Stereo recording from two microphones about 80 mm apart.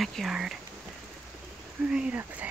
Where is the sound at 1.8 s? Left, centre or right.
Centre.